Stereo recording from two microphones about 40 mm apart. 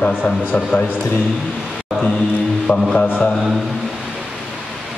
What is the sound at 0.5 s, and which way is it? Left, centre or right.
Speech, left.